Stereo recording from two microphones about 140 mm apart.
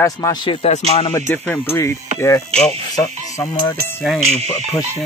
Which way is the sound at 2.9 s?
20° left (ahead or behind).